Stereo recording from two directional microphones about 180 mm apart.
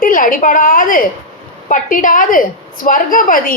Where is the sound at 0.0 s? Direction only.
50° left (ahead or behind).